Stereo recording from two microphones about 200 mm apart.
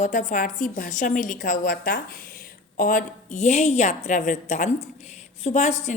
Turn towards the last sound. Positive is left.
turn(degrees=35)  # may be behind; listen again after turning